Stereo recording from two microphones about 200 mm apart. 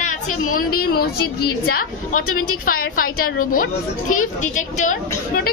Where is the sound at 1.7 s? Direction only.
45° left (ahead or behind).